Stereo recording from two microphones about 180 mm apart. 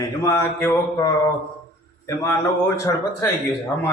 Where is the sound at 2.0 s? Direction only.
15° left (ahead or behind).